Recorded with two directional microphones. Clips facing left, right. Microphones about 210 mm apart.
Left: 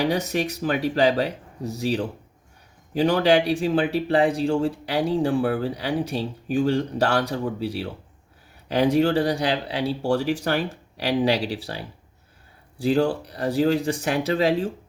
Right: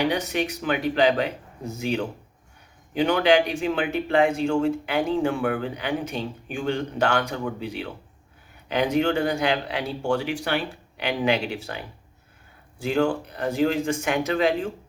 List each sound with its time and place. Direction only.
0.0 s speech: 40° left (ahead or behind)